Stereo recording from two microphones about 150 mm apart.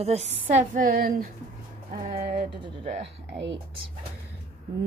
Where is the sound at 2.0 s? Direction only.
80° right.